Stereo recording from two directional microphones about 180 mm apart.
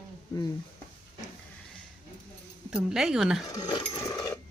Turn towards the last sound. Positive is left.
turn(degrees=20)  # may be behind; listen again after turning